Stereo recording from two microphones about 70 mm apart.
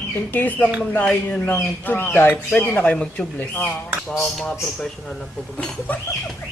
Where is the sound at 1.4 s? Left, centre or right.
Left.